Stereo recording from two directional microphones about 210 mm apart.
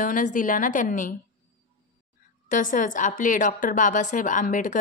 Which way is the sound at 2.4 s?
40° left (ahead or behind).